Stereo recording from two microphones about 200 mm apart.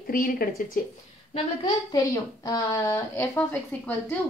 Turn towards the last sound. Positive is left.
turn(degrees=10)  # may be behind; listen again after turning